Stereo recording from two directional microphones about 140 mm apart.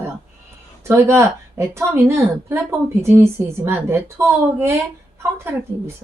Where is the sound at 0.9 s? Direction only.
20° right (ahead or behind).